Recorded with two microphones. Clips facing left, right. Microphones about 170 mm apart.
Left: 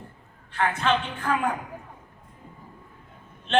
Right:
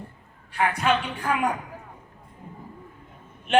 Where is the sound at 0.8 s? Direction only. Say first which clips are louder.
Even; 10° right (ahead or behind).